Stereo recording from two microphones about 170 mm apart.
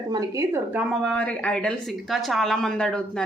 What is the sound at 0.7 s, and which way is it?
Speech, 10° right (ahead or behind).